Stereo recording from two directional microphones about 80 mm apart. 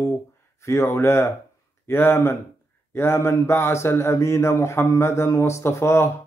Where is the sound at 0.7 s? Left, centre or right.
Left.